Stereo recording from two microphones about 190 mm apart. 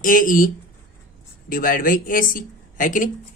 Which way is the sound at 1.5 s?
45° left (ahead or behind).